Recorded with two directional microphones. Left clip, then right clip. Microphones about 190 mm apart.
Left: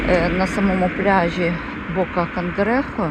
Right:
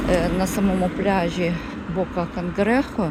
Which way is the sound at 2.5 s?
20° right (ahead or behind).